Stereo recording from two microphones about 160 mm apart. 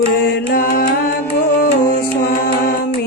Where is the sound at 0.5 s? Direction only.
60° left (ahead or behind).